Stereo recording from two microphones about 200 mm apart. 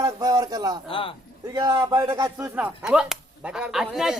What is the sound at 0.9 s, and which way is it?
Speech, 25° left (ahead or behind).